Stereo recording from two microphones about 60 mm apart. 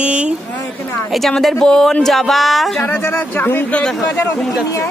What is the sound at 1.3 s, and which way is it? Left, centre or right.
A man's voice, centre.